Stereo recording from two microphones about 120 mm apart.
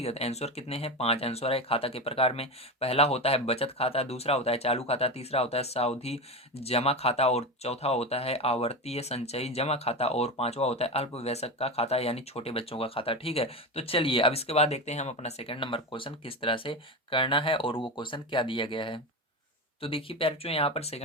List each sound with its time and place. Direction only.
0.0 s speech: 60° left (ahead or behind)